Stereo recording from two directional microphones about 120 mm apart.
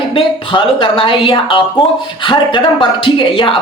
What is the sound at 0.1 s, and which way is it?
Speech, 45° left (ahead or behind).